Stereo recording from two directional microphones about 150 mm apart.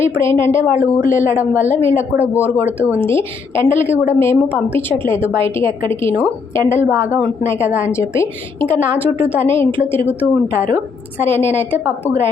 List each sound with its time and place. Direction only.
0.0 s a woman's voice: 15° left (ahead or behind)
2.2 s a woman's voice: 15° left (ahead or behind)
7.9 s a woman's voice: 15° left (ahead or behind)
11.3 s a woman's voice: 15° left (ahead or behind)